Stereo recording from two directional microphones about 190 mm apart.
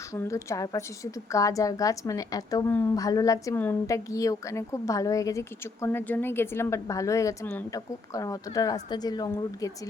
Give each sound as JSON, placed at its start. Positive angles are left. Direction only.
{"t": 0.1, "sound": "a woman's voice", "side_deg": 15}